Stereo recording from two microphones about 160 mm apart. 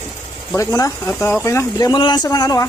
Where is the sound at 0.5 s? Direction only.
20° left (ahead or behind).